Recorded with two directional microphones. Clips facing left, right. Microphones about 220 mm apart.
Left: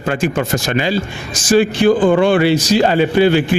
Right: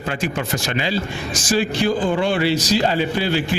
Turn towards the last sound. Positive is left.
turn(degrees=60)  # may be behind; listen again after turning